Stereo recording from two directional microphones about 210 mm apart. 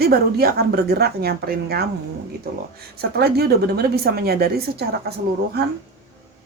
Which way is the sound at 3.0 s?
50° right (ahead or behind).